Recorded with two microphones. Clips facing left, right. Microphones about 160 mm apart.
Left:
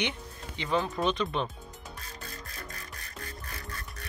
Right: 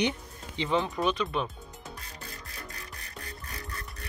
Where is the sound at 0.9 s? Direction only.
5° right (ahead or behind).